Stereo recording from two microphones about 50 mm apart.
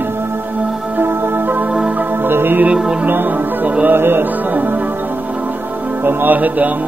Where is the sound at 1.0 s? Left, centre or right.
Right.